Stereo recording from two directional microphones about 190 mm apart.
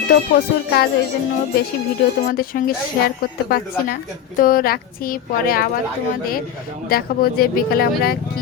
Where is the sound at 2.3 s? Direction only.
50° left (ahead or behind).